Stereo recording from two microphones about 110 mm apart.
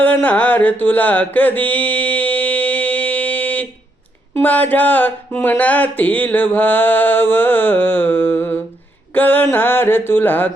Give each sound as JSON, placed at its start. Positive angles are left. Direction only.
{"t": 0.0, "sound": "carnatic music", "side_deg": 15}
{"t": 4.4, "sound": "speech", "side_deg": 15}